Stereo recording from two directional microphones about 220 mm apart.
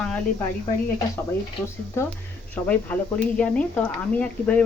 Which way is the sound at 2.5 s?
5° left (ahead or behind).